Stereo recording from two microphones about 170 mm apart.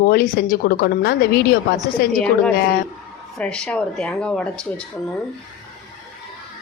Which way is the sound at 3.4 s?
5° left (ahead or behind).